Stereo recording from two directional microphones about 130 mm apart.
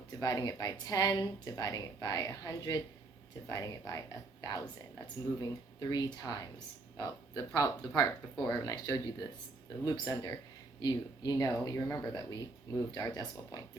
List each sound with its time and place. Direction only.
0.2 s speech: 30° left (ahead or behind)